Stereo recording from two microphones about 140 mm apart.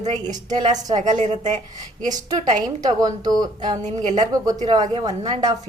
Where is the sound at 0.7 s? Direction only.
60° right (ahead or behind).